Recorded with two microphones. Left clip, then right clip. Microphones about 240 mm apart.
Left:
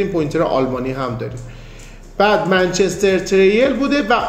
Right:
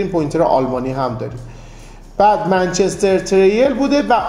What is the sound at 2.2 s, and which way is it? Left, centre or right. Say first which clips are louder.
A man's voice: right 1 dB; right.